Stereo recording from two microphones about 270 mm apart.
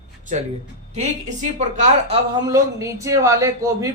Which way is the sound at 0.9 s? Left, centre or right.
Right.